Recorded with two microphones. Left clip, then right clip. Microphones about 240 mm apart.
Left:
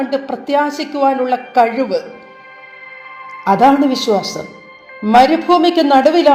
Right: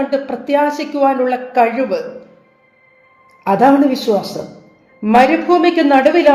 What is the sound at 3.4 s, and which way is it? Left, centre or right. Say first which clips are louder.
A woman's voice: even; centre.